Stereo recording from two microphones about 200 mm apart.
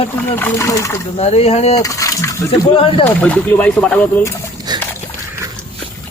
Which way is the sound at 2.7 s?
25° left (ahead or behind).